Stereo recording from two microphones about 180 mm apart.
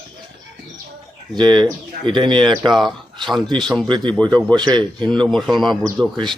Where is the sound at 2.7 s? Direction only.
Centre (ahead or behind).